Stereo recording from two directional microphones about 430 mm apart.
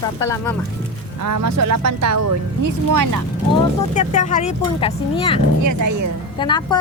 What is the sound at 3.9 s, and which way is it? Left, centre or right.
Speech, centre.